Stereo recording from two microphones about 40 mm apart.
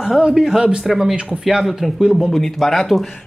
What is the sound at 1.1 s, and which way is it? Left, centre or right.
Speech, right.